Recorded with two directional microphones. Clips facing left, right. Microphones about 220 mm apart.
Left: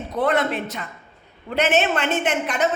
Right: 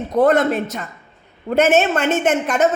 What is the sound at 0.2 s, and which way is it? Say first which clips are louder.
A woman's voice: right 6 dB; 45° right (ahead or behind).